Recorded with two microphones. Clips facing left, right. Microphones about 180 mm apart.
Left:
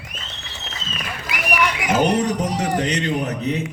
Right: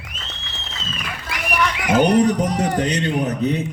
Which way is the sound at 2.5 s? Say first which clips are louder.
Right 1 dB; 40° right (ahead or behind).